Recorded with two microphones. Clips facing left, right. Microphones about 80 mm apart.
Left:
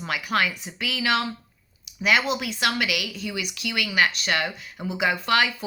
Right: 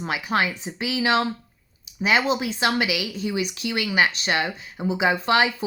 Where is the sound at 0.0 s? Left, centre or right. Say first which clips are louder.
Right 1 dB; right.